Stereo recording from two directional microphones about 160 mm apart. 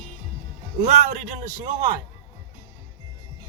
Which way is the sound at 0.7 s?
45° right (ahead or behind).